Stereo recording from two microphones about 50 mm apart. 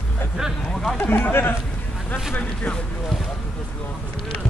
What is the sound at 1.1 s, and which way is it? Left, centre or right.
Speech, left.